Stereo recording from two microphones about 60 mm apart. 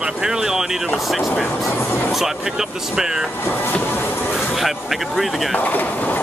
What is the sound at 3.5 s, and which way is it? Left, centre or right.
Speech, left.